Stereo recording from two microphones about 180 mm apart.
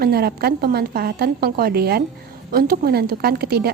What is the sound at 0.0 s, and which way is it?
A woman's voice, 60° right (ahead or behind).